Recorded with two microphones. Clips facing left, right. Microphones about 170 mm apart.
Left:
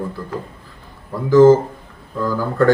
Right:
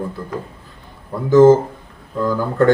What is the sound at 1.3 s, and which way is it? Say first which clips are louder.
Speech: even; 20° right (ahead or behind).